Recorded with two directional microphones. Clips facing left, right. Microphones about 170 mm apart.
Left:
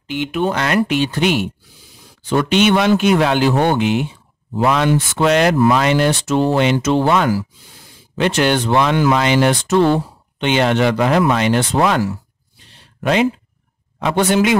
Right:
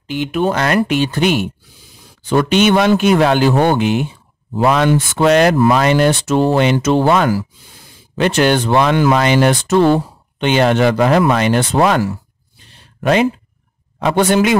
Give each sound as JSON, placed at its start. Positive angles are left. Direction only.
{"t": 0.0, "sound": "speech", "side_deg": -40}
{"t": 13.0, "sound": "speech", "side_deg": -45}